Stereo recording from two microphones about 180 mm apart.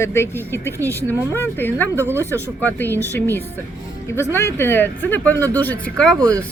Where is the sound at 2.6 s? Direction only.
10° left (ahead or behind).